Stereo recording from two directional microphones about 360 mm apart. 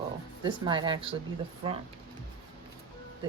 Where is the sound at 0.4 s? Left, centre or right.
Centre.